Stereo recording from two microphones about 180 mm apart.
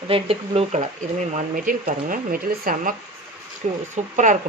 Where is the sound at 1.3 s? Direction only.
50° right (ahead or behind).